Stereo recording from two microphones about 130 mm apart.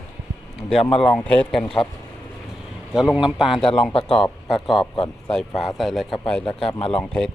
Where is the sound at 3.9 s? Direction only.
45° left (ahead or behind).